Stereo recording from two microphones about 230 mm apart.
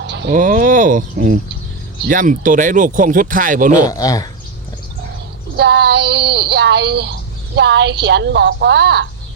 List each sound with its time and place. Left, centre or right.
0.0 s speech: right
3.8 s speech: centre
5.5 s speech: right